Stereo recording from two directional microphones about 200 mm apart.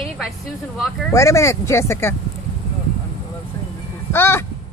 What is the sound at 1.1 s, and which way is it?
Speech, 15° left (ahead or behind).